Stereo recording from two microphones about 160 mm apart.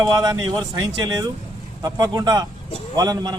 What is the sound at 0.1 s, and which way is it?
Speech, 25° right (ahead or behind).